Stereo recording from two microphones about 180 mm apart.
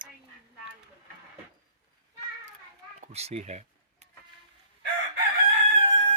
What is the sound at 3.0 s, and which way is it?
Cat, 35° right (ahead or behind).